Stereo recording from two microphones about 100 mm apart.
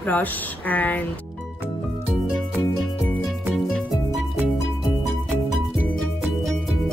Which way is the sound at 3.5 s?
Centre (ahead or behind).